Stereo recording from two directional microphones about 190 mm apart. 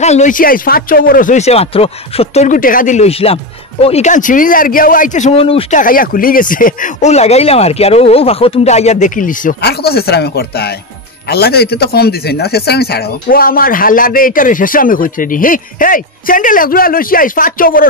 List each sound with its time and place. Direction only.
0.0 s speech: 35° left (ahead or behind)
5.8 s a man's voice: 45° left (ahead or behind)